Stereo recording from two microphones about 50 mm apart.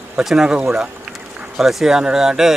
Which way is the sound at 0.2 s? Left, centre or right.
Centre.